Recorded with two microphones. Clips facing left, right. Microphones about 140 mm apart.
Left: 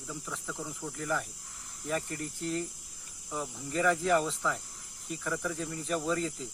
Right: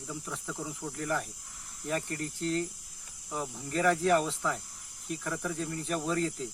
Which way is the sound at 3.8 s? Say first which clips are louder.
Right 1 dB; centre (ahead or behind).